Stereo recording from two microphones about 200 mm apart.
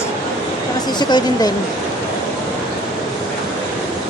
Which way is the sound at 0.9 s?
20° left (ahead or behind).